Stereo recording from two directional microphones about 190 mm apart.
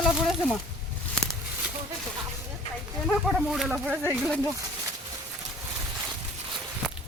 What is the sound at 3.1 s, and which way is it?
Speech, centre (ahead or behind).